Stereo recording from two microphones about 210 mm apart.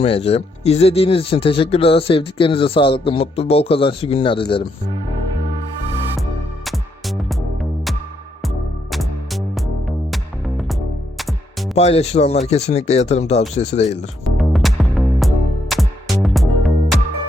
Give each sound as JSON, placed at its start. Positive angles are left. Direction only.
{"t": 0.0, "sound": "speech", "side_deg": 25}
{"t": 6.7, "sound": "music", "side_deg": 0}
{"t": 11.2, "sound": "music", "side_deg": 0}
{"t": 11.7, "sound": "speech", "side_deg": 30}
{"t": 14.3, "sound": "music", "side_deg": 0}